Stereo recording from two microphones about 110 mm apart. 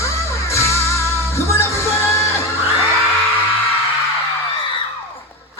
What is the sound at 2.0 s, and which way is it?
Music, 25° left (ahead or behind).